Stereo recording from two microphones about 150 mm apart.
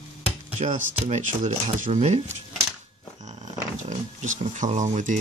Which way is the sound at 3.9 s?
55° right (ahead or behind).